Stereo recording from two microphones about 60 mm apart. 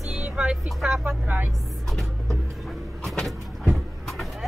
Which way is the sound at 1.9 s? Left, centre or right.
Centre.